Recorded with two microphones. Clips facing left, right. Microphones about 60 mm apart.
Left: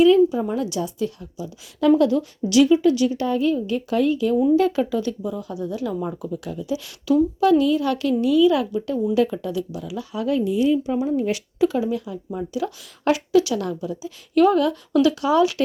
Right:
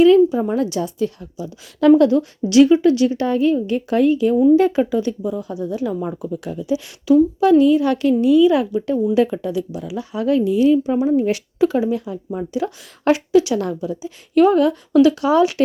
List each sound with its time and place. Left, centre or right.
0.3 s a woman's voice: right
10.2 s a woman's voice: right
10.8 s speech: right